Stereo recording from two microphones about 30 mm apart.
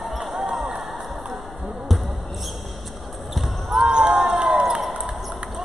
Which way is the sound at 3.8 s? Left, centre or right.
Right.